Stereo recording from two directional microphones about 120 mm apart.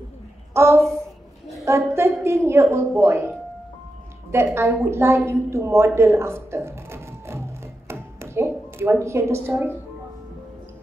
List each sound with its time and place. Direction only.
0.5 s a woman's voice: 20° right (ahead or behind)
4.3 s a woman's voice: 20° right (ahead or behind)
5.9 s a sound: 20° right (ahead or behind)